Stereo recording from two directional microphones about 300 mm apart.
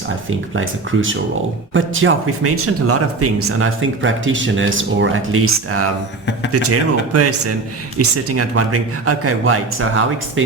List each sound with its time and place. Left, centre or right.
0.3 s speech: right